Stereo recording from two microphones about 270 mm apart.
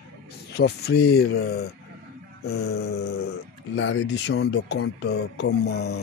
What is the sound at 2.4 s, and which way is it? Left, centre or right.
Speech, left.